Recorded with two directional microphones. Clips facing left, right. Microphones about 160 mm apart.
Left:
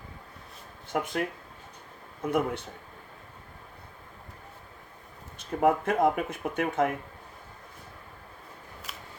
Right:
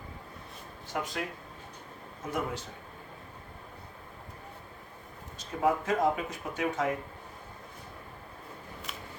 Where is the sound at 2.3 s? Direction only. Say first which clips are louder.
Left 6 dB; 60° left (ahead or behind).